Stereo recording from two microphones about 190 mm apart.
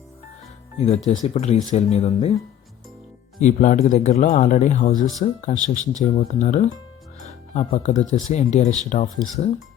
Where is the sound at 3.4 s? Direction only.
40° left (ahead or behind).